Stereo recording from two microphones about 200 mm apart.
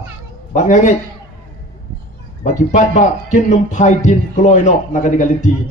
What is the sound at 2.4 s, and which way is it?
A man's voice, 40° left (ahead or behind).